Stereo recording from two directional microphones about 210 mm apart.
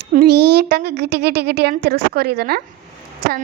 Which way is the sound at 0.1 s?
50° right (ahead or behind).